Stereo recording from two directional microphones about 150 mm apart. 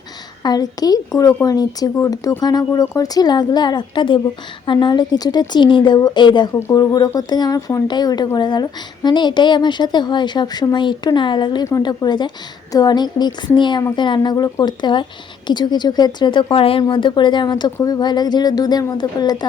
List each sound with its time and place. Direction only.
0.4 s speech: 25° left (ahead or behind)
6.5 s speech: 15° left (ahead or behind)